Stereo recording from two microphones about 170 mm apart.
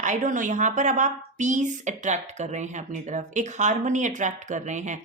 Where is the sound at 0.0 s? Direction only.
50° right (ahead or behind).